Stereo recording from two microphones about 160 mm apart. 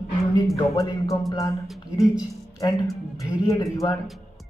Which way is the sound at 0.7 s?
20° left (ahead or behind).